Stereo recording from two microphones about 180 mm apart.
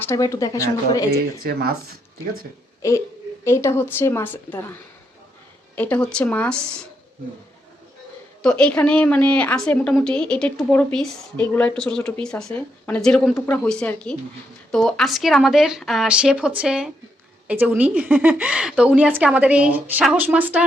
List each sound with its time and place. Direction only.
0.0 s speech: 15° left (ahead or behind)
1.1 s speech: 60° right (ahead or behind)
2.8 s a woman's voice: 15° left (ahead or behind)
5.7 s a woman's voice: 10° left (ahead or behind)
8.4 s a woman's voice: 5° left (ahead or behind)